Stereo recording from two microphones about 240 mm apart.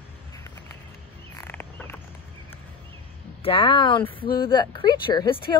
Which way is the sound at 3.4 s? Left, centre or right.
Left.